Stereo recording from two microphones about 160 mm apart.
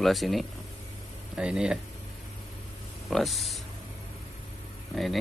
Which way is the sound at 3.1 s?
Centre (ahead or behind).